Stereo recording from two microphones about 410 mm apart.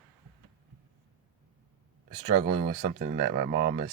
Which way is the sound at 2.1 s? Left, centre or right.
Centre.